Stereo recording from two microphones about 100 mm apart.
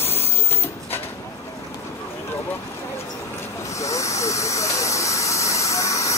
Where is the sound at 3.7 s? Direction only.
30° left (ahead or behind).